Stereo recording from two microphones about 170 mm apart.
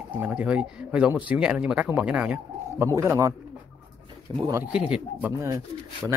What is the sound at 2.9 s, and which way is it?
Speech, 15° right (ahead or behind).